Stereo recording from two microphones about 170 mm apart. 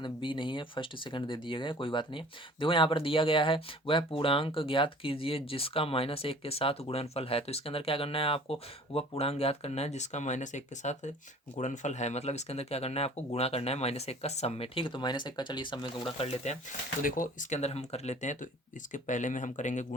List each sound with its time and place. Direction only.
0.0 s speech: 30° left (ahead or behind)
17.0 s speech: 55° left (ahead or behind)